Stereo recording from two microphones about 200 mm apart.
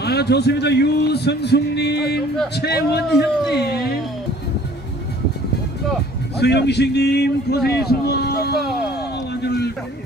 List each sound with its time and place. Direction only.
0.0 s a man's voice: 55° left (ahead or behind)
6.4 s a man's voice: 55° left (ahead or behind)
9.3 s a sound: 55° left (ahead or behind)